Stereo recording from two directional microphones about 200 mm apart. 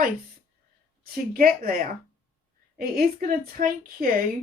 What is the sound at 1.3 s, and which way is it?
A woman's voice, 45° right (ahead or behind).